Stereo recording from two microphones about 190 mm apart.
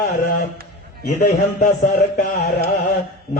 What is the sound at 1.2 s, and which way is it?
A man's voice, 40° left (ahead or behind).